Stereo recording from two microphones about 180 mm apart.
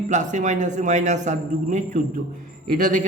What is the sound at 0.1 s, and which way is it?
A man's voice, 45° right (ahead or behind).